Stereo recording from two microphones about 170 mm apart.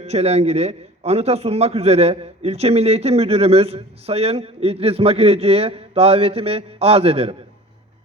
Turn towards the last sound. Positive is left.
turn(degrees=-35)  # may be behind; listen again after turning